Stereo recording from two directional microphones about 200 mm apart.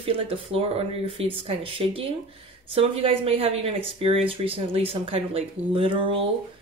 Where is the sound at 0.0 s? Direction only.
25° right (ahead or behind).